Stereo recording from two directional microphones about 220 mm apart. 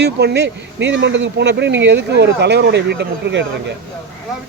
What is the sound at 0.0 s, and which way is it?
Speech, 50° right (ahead or behind).